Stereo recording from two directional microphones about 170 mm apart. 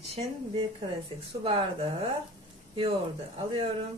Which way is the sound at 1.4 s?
35° right (ahead or behind).